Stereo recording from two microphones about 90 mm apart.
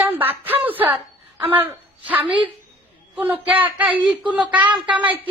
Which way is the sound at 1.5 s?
20° right (ahead or behind).